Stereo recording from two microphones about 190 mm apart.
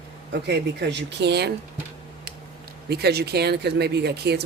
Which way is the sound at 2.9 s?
55° right (ahead or behind).